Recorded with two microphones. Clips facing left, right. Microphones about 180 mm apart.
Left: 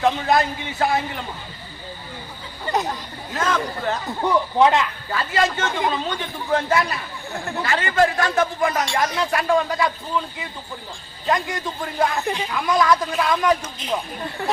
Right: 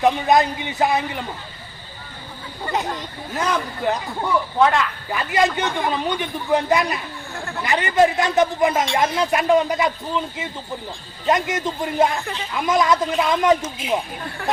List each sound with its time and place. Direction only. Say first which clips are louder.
0.0 s a man's voice: right 2 dB; 20° right (ahead or behind)
2.7 s speech: left 2 dB; 20° left (ahead or behind)
3.3 s a man's voice: even; 15° right (ahead or behind)
4.2 s speech: left 1 dB; 20° left (ahead or behind)
5.1 s a man's voice: right 2 dB; 15° right (ahead or behind)
12.1 s speech: left 3 dB; 15° left (ahead or behind)
12.5 s speech: right 1 dB; 20° right (ahead or behind)